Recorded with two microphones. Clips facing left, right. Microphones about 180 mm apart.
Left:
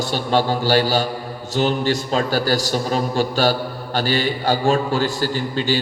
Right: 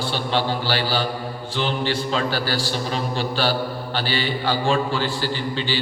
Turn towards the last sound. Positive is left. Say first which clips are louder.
# left 4 dB
turn(degrees=45)  # may be behind; listen again after turning